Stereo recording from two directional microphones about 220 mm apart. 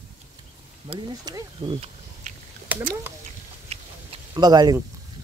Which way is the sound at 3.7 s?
20° right (ahead or behind).